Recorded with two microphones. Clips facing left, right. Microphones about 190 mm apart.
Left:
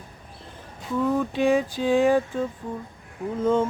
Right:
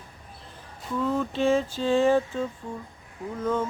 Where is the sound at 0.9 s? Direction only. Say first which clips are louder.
Left 3 dB; 10° left (ahead or behind).